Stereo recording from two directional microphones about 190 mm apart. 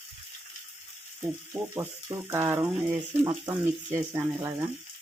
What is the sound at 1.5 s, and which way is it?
Speech, 15° right (ahead or behind).